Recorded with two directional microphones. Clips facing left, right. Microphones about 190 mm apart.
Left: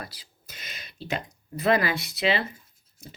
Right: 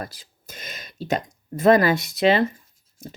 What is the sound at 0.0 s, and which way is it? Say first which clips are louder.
Speech: right 6 dB; 45° right (ahead or behind).